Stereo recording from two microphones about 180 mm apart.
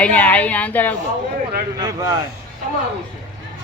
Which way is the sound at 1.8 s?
20° right (ahead or behind).